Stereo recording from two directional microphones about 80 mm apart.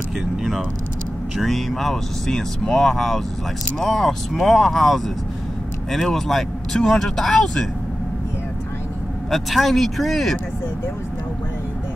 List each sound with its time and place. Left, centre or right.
0.2 s speech: centre
9.3 s speech: centre